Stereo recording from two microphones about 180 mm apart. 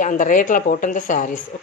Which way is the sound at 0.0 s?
45° left (ahead or behind).